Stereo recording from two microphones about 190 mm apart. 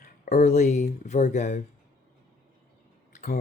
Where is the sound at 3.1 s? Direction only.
40° left (ahead or behind).